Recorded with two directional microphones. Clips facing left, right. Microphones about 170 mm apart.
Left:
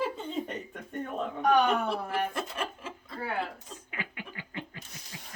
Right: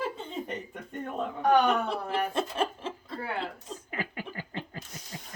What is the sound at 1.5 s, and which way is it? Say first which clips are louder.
Speech: right 1 dB; 25° right (ahead or behind).